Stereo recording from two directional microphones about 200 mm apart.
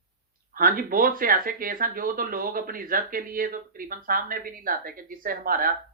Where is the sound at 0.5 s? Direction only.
45° right (ahead or behind).